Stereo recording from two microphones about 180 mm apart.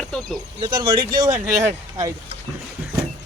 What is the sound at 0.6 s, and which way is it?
Speech, 25° right (ahead or behind).